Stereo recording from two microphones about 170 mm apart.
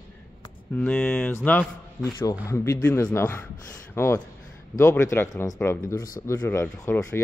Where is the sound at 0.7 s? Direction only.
10° left (ahead or behind).